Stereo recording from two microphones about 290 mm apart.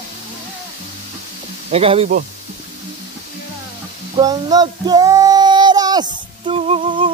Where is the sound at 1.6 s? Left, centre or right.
Right.